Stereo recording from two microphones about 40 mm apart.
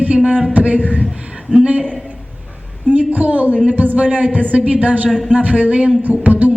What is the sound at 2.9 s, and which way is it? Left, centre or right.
A woman's voice, right.